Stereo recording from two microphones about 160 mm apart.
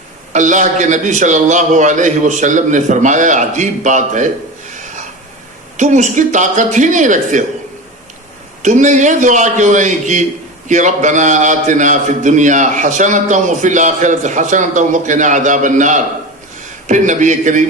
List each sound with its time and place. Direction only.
0.3 s a man's voice: 50° right (ahead or behind)
5.7 s a man's voice: 50° right (ahead or behind)
8.6 s a man's voice: 50° right (ahead or behind)